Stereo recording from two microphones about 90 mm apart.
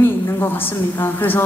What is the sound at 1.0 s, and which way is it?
Speech, 25° left (ahead or behind).